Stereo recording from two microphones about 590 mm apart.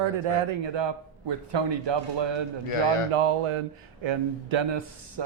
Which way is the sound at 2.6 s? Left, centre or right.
Left.